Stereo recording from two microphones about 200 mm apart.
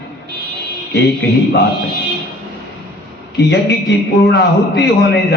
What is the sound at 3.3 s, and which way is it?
A man's voice, 55° left (ahead or behind).